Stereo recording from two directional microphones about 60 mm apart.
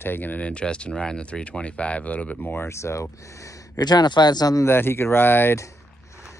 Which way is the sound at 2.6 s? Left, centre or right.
Left.